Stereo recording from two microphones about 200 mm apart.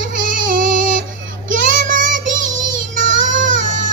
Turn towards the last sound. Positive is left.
turn(degrees=-40)  # may be behind; listen again after turning